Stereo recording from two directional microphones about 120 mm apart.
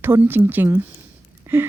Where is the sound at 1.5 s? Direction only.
15° right (ahead or behind).